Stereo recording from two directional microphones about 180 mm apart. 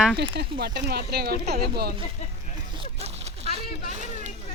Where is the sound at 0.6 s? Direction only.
65° right (ahead or behind).